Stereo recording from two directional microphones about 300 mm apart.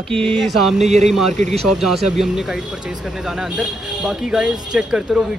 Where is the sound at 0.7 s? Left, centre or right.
Right.